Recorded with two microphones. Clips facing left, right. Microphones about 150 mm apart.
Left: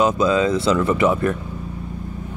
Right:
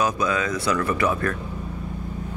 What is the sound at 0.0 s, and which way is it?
Speech, 25° left (ahead or behind).